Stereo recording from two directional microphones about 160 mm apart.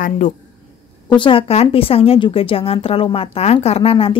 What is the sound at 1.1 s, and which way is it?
Speech, 35° left (ahead or behind).